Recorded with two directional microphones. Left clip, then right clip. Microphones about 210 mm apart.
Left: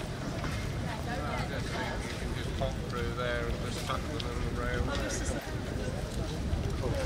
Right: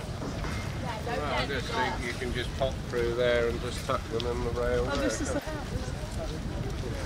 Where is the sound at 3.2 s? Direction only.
60° right (ahead or behind).